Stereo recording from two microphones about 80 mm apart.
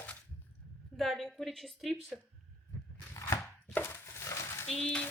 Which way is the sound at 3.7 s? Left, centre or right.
Left.